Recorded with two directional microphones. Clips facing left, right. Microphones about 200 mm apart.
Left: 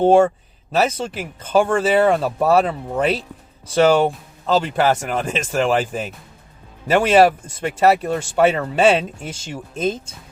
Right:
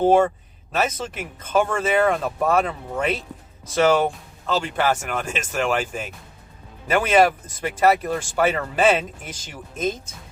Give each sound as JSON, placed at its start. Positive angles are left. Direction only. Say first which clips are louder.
{"t": 0.7, "sound": "speech", "louder": "left 5 dB", "side_deg": 30}